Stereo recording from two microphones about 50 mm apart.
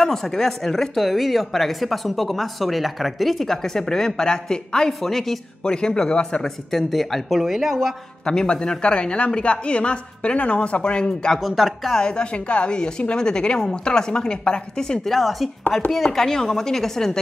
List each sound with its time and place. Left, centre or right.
0.0 s speech: centre
5.7 s a woman's voice: centre
6.7 s speech: centre
8.3 s speech: centre
11.3 s speech: centre
12.0 s a woman's voice: centre
15.0 s speech: centre
16.0 s a woman's voice: centre